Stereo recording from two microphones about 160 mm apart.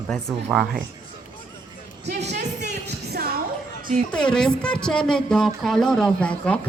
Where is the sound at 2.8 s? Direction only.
80° right.